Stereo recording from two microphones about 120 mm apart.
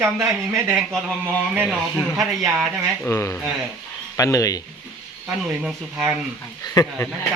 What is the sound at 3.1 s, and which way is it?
Speech, 20° left (ahead or behind).